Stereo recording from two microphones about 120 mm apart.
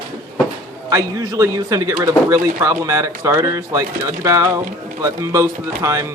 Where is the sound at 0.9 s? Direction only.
30° right (ahead or behind).